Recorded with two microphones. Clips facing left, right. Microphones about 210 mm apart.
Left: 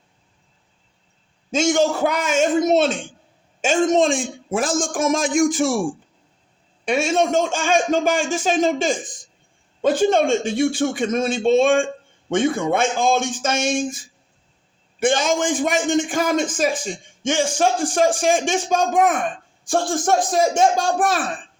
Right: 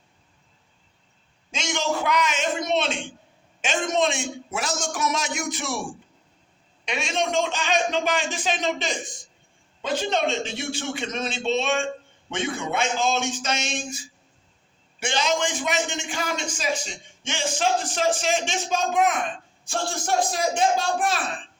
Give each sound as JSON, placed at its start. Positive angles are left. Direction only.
{"t": 1.5, "sound": "a man's voice", "side_deg": 45}
{"t": 6.8, "sound": "a man's voice", "side_deg": 45}